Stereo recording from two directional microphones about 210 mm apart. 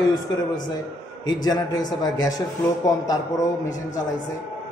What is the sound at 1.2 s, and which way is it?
A man's voice, 20° left (ahead or behind).